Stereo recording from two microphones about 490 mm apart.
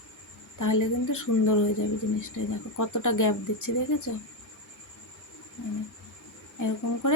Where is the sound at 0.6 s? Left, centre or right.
Left.